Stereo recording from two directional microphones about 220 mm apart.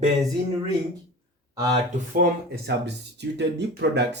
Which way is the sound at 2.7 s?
50° right (ahead or behind).